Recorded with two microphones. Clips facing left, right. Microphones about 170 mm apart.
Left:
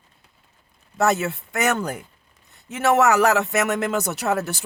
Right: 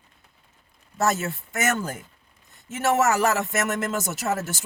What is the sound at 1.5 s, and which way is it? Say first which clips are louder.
Speech: left 3 dB; 65° left (ahead or behind).